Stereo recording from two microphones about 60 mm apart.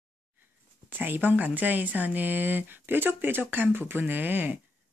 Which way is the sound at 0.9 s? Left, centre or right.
Right.